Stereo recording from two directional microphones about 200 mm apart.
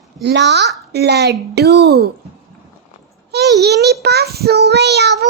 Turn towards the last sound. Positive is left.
turn(degrees=-55)  # may be behind; listen again after turning